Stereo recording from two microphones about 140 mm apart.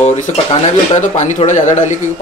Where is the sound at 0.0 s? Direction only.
55° left (ahead or behind).